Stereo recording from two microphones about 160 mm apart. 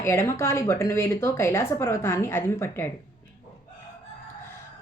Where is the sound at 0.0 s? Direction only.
15° left (ahead or behind).